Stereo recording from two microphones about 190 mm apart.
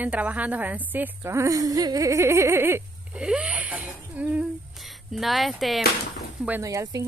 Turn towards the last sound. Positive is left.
turn(degrees=-15)  # may be behind; listen again after turning